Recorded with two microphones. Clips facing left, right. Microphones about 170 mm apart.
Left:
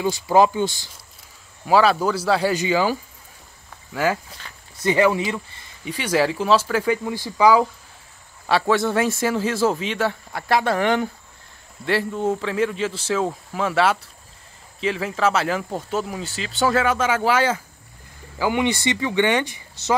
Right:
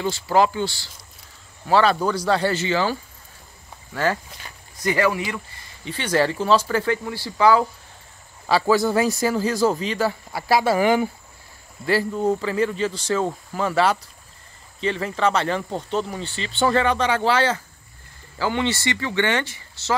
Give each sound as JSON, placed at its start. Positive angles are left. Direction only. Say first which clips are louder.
{"t": 0.0, "sound": "speech", "louder": "left 2 dB", "side_deg": 15}
{"t": 1.7, "sound": "speech", "louder": "left 1 dB", "side_deg": 5}
{"t": 4.4, "sound": "speech", "louder": "even", "side_deg": -15}
{"t": 4.8, "sound": "speech", "louder": "left 3 dB", "side_deg": 20}
{"t": 5.9, "sound": "speech", "louder": "left 1 dB", "side_deg": 10}
{"t": 8.5, "sound": "speech", "louder": "right 1 dB", "side_deg": 0}